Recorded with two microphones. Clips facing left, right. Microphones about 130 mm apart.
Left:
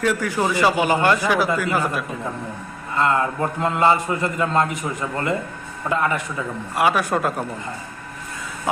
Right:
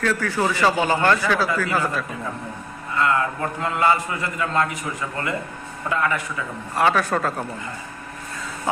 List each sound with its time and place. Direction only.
0.0 s a man's voice: 15° left (ahead or behind)
3.0 s a man's voice: 25° left (ahead or behind)
5.9 s a man's voice: 25° left (ahead or behind)
6.7 s a man's voice: 10° left (ahead or behind)